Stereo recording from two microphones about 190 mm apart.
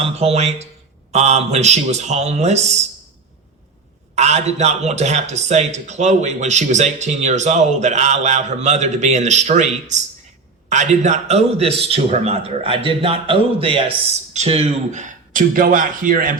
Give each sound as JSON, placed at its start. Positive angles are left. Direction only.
{"t": 0.0, "sound": "a man's voice", "side_deg": -30}
{"t": 4.1, "sound": "a man's voice", "side_deg": -35}